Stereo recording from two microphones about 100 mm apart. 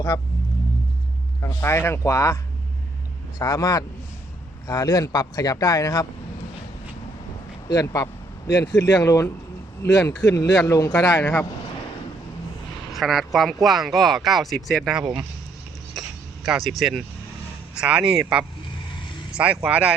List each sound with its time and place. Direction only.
0.1 s speech: 40° left (ahead or behind)
1.6 s speech: 25° left (ahead or behind)
7.7 s speech: 35° left (ahead or behind)
11.2 s speech: 15° left (ahead or behind)
12.9 s speech: centre (ahead or behind)
16.0 s a sound: centre (ahead or behind)
17.7 s speech: 10° right (ahead or behind)